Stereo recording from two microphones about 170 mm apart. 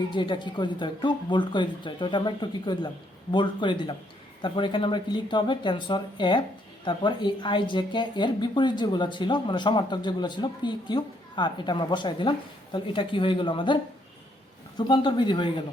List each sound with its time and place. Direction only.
0.1 s speech: 25° left (ahead or behind)
14.8 s speech: 25° left (ahead or behind)